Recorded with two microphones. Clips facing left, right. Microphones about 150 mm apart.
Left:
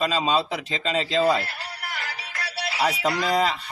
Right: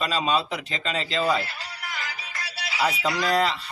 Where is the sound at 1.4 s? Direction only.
60° left (ahead or behind).